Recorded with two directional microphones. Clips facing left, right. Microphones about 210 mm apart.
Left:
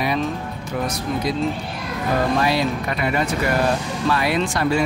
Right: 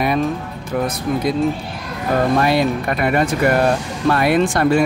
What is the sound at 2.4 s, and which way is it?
Speech, 55° right (ahead or behind).